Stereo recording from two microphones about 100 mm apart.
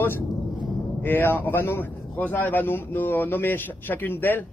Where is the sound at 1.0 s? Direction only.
20° left (ahead or behind).